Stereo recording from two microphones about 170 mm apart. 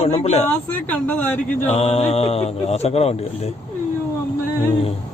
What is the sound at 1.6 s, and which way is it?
Speech, 40° left (ahead or behind).